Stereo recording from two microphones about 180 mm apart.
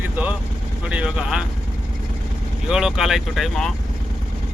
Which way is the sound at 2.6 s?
5° right (ahead or behind).